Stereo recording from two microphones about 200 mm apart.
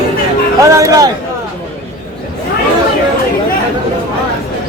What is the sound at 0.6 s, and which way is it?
Music, 15° right (ahead or behind).